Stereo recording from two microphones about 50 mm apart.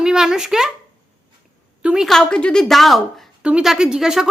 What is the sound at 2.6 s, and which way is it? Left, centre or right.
Speech, centre.